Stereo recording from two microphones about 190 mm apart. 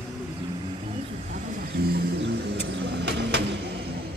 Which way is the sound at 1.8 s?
60° right (ahead or behind).